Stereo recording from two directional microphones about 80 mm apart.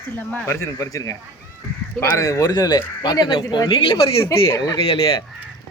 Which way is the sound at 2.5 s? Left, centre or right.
Left.